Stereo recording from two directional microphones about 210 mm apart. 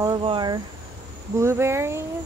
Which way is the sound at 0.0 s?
25° right (ahead or behind).